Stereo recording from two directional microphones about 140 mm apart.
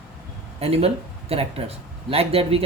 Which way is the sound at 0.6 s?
45° right (ahead or behind).